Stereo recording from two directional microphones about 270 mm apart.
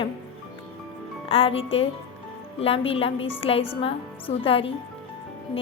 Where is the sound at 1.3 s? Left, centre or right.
Left.